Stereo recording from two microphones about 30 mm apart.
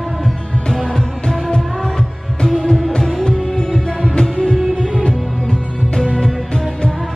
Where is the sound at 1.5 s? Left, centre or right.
Left.